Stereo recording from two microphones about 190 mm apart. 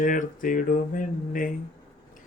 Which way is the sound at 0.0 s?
45° left (ahead or behind).